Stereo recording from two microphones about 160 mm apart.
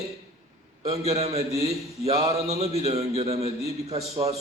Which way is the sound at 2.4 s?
40° right (ahead or behind).